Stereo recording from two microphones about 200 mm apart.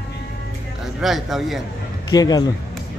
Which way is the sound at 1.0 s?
Centre (ahead or behind).